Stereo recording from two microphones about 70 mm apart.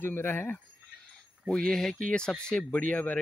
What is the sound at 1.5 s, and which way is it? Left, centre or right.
Speech, centre.